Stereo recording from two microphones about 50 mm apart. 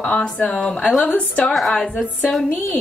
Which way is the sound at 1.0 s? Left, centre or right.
Left.